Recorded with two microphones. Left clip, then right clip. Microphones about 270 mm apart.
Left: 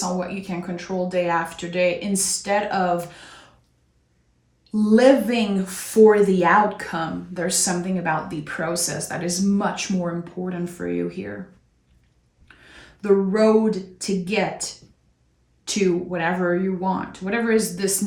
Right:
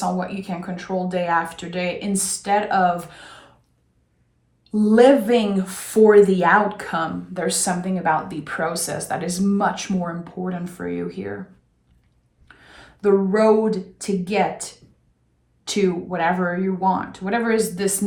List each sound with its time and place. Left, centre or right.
0.2 s speech: centre
4.7 s speech: centre
12.5 s speech: centre